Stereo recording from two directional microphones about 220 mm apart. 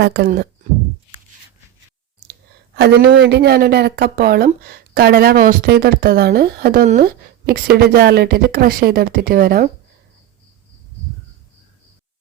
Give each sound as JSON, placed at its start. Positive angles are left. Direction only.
{"t": 0.0, "sound": "speech", "side_deg": -45}
{"t": 2.7, "sound": "a woman's voice", "side_deg": -45}